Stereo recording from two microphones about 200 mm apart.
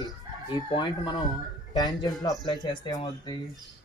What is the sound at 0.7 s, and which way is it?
A man's voice, 25° left (ahead or behind).